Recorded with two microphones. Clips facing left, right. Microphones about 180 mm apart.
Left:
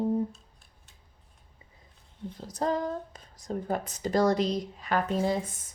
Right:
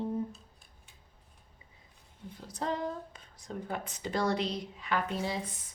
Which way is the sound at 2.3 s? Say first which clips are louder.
Left 5 dB; 40° left (ahead or behind).